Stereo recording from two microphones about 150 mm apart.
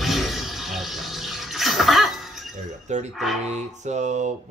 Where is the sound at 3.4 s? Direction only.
50° right (ahead or behind).